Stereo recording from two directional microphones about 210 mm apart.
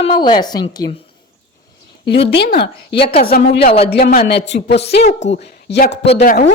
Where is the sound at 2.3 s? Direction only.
50° left (ahead or behind).